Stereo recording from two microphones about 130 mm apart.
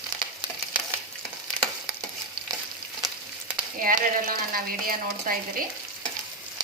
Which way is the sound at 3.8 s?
90° right.